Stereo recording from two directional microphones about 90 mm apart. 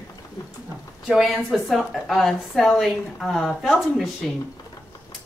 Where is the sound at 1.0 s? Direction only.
5° right (ahead or behind).